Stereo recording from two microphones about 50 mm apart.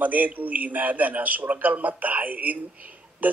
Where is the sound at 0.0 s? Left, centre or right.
Right.